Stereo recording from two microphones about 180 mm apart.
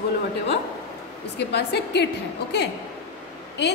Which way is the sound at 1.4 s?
65° left (ahead or behind).